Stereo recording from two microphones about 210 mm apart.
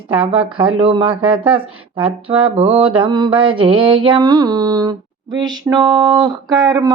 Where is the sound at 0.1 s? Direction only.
25° right (ahead or behind).